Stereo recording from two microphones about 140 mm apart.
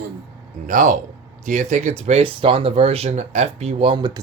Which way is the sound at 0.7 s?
70° right (ahead or behind).